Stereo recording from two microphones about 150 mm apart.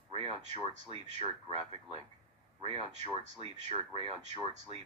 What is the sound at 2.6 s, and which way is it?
Speech, 45° right (ahead or behind).